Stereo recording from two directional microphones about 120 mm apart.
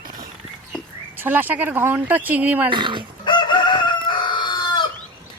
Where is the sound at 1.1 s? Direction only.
15° right (ahead or behind).